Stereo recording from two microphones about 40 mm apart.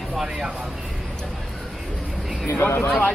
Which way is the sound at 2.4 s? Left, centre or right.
Left.